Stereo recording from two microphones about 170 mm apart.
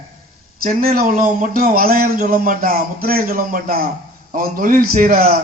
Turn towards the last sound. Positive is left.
turn(degrees=-60)  # may be behind; listen again after turning